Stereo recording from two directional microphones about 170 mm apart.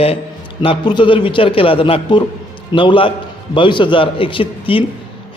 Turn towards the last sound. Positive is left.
turn(degrees=30)  # may be behind; listen again after turning